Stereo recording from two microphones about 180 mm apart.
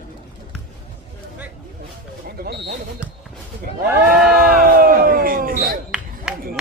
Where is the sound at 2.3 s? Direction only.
60° right (ahead or behind).